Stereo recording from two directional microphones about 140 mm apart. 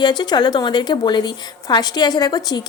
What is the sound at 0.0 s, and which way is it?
A woman's voice, 30° left (ahead or behind).